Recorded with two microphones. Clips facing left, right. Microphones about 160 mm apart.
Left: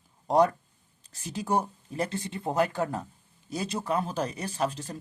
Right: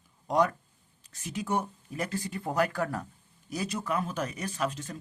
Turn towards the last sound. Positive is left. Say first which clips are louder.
# left 2 dB
turn(degrees=35)  # may be behind; listen again after turning